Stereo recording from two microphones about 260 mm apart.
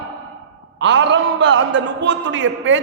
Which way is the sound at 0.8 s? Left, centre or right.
Right.